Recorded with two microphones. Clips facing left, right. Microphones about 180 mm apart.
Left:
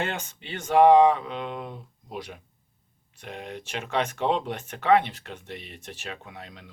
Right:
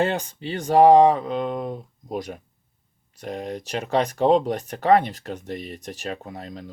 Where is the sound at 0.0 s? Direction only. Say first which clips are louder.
Right 8 dB; 35° right (ahead or behind).